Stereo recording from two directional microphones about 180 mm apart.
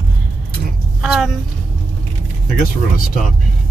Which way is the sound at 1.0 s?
Centre (ahead or behind).